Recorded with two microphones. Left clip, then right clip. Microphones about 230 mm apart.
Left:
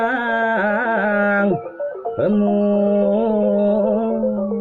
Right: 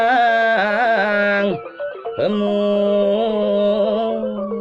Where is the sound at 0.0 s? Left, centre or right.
Centre.